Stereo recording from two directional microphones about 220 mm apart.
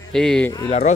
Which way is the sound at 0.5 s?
25° left (ahead or behind).